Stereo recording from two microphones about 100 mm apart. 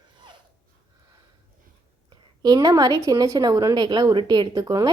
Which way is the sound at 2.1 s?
45° right (ahead or behind).